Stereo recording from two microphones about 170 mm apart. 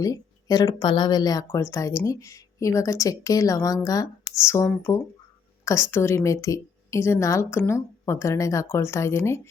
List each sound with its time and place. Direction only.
0.0 s a woman's voice: 20° left (ahead or behind)